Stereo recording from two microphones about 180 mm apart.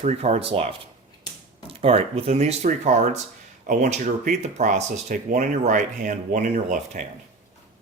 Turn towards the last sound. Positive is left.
turn(degrees=-45)  # may be behind; listen again after turning